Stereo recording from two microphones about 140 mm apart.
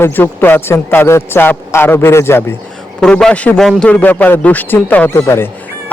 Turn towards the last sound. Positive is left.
turn(degrees=20)  # may be behind; listen again after turning